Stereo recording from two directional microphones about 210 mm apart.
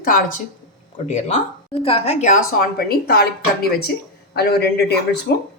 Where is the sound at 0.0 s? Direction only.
40° left (ahead or behind).